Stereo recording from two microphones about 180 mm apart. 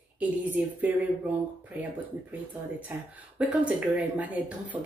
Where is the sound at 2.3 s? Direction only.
10° right (ahead or behind).